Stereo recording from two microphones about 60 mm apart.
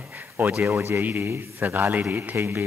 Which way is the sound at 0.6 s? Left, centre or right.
Right.